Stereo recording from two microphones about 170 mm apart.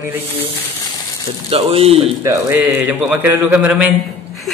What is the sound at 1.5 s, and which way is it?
Speech, 35° right (ahead or behind).